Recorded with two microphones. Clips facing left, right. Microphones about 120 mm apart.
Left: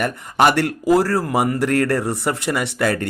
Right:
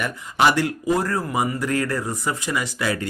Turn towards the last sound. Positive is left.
turn(degrees=55)  # may be behind; listen again after turning